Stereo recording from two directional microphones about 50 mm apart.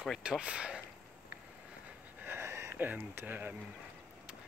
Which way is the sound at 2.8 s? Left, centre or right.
Right.